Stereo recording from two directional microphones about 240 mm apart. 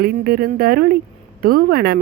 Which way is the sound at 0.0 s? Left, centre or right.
Right.